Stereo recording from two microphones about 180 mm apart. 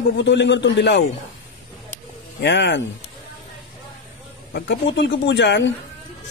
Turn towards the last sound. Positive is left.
turn(degrees=75)  # may be behind; listen again after turning